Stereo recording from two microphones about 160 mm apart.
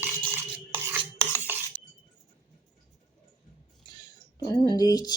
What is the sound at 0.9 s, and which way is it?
Filing, 15° right (ahead or behind).